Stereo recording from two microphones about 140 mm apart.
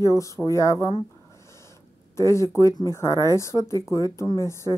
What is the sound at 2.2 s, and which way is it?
Speech, 20° left (ahead or behind).